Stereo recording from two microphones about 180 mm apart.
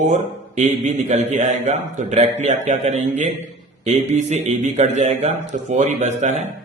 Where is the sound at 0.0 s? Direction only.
40° right (ahead or behind).